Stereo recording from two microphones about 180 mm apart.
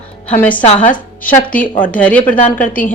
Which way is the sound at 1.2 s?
10° left (ahead or behind).